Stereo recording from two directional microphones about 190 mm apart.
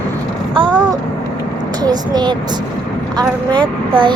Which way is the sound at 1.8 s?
20° right (ahead or behind).